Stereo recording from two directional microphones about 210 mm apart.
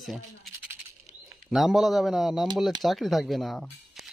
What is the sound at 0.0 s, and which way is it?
Speech, centre (ahead or behind).